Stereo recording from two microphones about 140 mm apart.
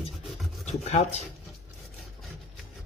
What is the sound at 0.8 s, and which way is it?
Speech, 50° left (ahead or behind).